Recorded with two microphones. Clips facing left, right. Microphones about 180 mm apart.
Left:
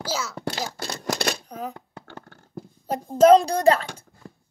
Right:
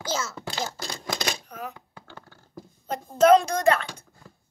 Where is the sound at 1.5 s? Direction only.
35° left (ahead or behind).